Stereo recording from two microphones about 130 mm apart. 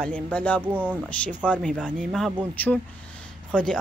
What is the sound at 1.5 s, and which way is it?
Speech, 5° left (ahead or behind).